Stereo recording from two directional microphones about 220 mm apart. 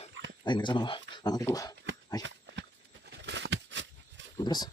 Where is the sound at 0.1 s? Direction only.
55° right (ahead or behind).